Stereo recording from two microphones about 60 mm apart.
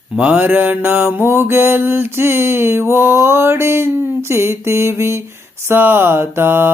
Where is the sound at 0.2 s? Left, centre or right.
Right.